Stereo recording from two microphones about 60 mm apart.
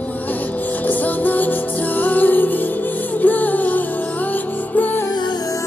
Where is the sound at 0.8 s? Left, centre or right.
Left.